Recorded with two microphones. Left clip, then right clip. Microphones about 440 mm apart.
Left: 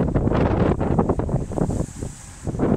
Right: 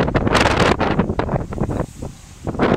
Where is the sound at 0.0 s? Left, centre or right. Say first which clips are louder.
Right 6 dB; right.